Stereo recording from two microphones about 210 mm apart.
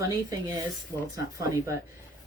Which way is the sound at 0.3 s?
15° right (ahead or behind).